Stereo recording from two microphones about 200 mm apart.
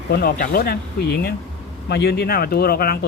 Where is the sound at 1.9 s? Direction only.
55° left (ahead or behind).